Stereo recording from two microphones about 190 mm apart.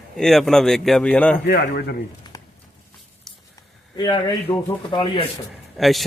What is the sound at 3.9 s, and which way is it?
Speech, 20° left (ahead or behind).